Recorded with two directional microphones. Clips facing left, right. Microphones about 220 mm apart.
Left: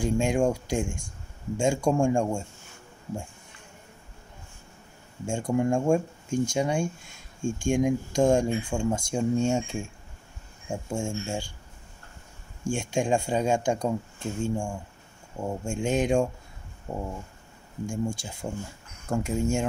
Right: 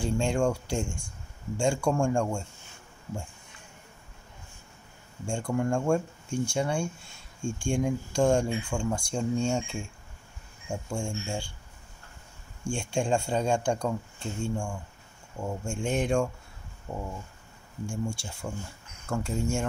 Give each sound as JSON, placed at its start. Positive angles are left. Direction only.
{"t": 0.0, "sound": "speech", "side_deg": 15}
{"t": 5.2, "sound": "speech", "side_deg": 20}
{"t": 12.6, "sound": "speech", "side_deg": 15}